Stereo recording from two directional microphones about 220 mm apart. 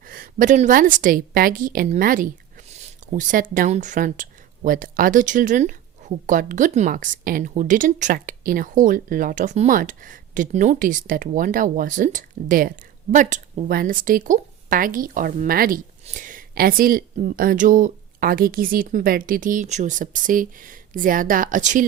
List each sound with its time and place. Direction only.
0.0 s a woman's voice: 40° right (ahead or behind)